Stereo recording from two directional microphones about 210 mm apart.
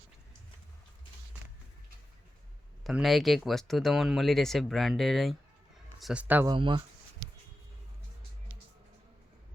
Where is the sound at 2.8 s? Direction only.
Centre (ahead or behind).